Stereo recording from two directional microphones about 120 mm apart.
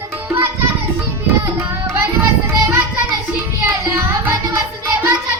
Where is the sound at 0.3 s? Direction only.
20° right (ahead or behind).